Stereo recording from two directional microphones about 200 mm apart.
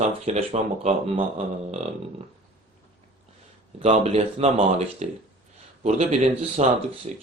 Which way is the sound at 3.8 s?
35° right (ahead or behind).